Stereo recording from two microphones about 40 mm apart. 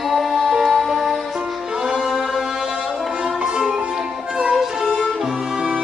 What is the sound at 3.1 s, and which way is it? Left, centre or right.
Music, right.